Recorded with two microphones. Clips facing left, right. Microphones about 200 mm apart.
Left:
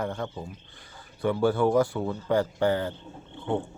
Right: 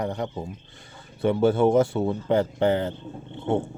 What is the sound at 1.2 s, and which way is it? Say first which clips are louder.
Speech: right 4 dB; 25° right (ahead or behind).